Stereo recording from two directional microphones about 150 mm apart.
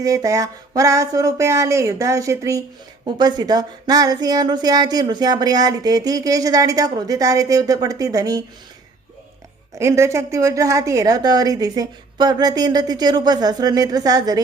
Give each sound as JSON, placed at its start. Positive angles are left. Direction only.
{"t": 0.0, "sound": "speech", "side_deg": -20}
{"t": 9.7, "sound": "speech", "side_deg": -20}